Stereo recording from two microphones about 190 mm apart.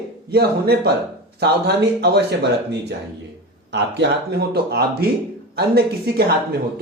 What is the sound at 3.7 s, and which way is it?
Speech, 65° right (ahead or behind).